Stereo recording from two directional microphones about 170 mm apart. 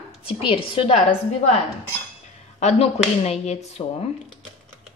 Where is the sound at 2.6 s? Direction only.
40° left (ahead or behind).